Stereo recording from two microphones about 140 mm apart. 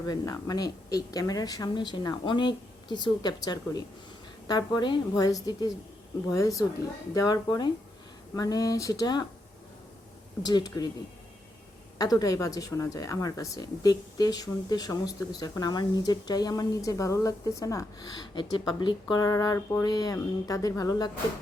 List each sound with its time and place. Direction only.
0.1 s speech: 25° left (ahead or behind)
10.4 s speech: 30° left (ahead or behind)
11.9 s speech: 25° left (ahead or behind)